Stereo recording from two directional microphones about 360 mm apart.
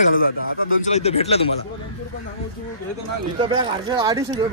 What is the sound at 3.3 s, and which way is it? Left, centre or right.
Speech, centre.